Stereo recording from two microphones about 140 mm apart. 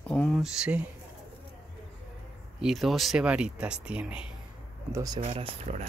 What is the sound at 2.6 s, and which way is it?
Speech, centre (ahead or behind).